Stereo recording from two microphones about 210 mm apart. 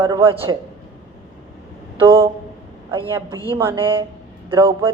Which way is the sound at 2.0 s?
25° right (ahead or behind).